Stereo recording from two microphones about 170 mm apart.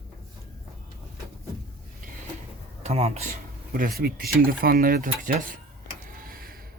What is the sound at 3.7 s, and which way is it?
Speech, 60° right (ahead or behind).